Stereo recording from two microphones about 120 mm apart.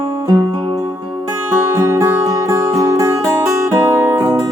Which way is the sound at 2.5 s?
30° right (ahead or behind).